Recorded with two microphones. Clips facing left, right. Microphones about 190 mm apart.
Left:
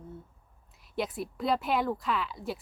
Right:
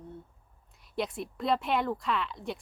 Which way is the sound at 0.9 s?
Centre (ahead or behind).